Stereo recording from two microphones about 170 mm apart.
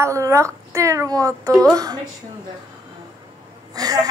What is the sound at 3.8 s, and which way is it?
Speech, 20° right (ahead or behind).